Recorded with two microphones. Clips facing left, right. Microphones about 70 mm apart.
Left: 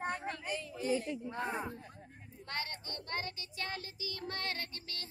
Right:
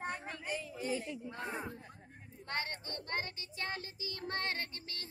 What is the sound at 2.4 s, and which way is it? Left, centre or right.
Child singing, right.